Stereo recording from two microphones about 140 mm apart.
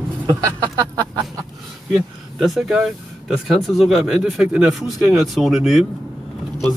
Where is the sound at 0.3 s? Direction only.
30° right (ahead or behind).